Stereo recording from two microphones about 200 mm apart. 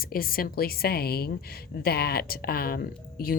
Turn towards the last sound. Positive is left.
turn(degrees=45)  # may be behind; listen again after turning